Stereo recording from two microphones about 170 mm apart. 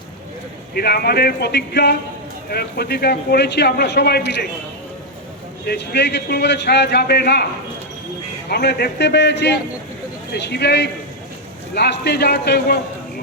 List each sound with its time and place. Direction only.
0.7 s speech: 65° left (ahead or behind)
5.6 s speech: 75° left (ahead or behind)
8.4 s a man's voice: 70° left (ahead or behind)